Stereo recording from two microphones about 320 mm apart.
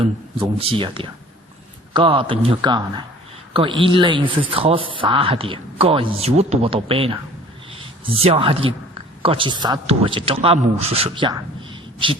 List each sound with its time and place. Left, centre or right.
0.0 s a man's voice: centre